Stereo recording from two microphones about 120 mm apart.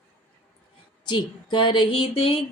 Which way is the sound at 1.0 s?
40° left (ahead or behind).